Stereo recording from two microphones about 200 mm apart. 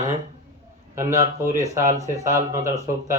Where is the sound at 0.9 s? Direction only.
15° right (ahead or behind).